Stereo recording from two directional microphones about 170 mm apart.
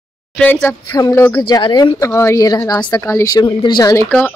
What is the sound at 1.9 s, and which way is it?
Speech, 15° left (ahead or behind).